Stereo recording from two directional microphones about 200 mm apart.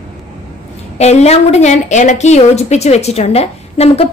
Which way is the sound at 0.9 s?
35° left (ahead or behind).